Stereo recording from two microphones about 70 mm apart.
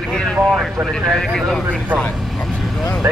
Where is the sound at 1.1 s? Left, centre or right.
Centre.